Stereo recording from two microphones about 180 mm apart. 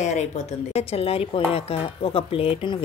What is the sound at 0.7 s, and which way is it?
Speech, 35° left (ahead or behind).